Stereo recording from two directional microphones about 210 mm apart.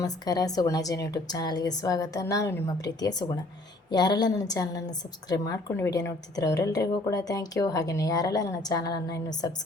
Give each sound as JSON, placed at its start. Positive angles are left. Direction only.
{"t": 0.0, "sound": "a woman's voice", "side_deg": 15}